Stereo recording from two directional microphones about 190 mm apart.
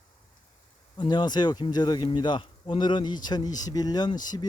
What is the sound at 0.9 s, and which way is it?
Speech, 20° left (ahead or behind).